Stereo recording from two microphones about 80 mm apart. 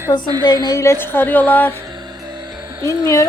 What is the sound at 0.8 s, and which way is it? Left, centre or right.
Speech, left.